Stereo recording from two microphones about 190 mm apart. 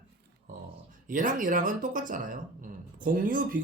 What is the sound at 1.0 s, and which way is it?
Speech, 45° right (ahead or behind).